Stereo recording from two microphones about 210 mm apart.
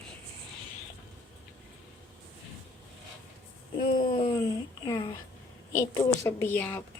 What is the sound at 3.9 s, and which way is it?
A woman's voice, 25° left (ahead or behind).